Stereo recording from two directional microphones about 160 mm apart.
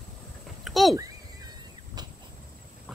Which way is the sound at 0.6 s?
Centre (ahead or behind).